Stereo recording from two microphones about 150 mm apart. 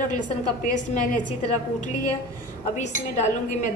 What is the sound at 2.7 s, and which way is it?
Speech, 50° left (ahead or behind).